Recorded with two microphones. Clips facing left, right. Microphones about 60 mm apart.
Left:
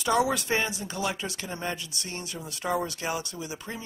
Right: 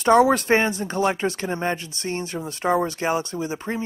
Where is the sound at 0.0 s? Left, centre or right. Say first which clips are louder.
Right 9 dB; right.